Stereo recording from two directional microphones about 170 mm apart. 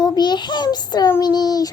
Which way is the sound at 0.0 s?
25° left (ahead or behind).